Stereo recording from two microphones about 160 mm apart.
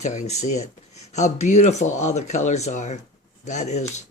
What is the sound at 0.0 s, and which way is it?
Speech, 45° left (ahead or behind).